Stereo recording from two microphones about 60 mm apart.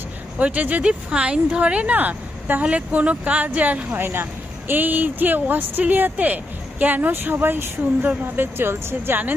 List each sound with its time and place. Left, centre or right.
0.3 s speech: right
4.0 s speech: right